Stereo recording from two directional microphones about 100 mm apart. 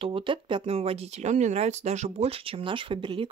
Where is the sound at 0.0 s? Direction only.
60° right (ahead or behind).